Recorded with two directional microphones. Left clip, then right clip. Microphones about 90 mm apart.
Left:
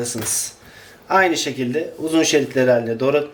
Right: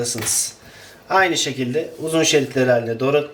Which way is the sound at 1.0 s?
30° left (ahead or behind).